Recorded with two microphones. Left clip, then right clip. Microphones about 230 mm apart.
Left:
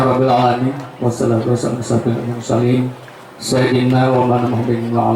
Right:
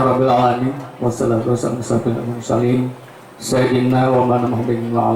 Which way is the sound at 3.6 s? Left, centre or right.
Centre.